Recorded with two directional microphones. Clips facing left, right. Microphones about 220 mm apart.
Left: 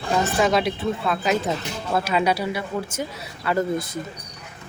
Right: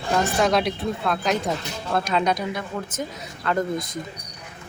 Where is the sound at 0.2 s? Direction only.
Centre (ahead or behind).